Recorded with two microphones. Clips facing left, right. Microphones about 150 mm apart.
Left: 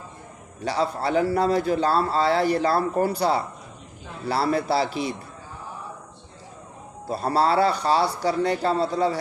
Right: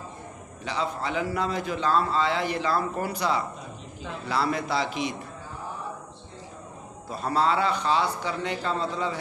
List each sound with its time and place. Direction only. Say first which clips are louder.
0.6 s a man's voice: left 5 dB; 35° left (ahead or behind)
7.1 s a man's voice: left 3 dB; 35° left (ahead or behind)